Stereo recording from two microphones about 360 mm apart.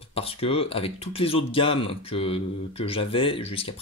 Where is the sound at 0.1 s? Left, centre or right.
Centre.